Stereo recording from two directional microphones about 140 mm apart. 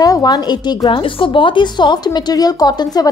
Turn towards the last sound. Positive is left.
turn(degrees=30)  # may be behind; listen again after turning